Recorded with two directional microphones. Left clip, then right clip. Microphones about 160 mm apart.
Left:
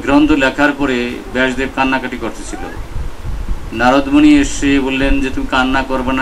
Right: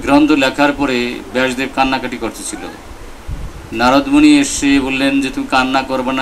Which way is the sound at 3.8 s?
70° right (ahead or behind).